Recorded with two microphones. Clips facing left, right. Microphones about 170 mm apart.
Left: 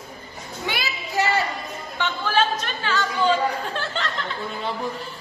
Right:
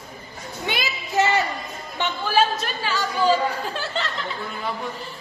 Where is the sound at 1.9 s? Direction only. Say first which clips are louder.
Right 2 dB; 15° right (ahead or behind).